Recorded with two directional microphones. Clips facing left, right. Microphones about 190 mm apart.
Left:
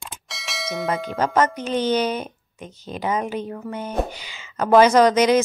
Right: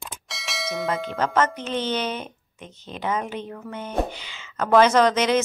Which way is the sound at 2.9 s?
10° left (ahead or behind).